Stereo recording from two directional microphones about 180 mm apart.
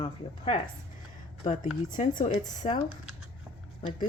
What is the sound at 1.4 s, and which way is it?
Speech, 45° left (ahead or behind).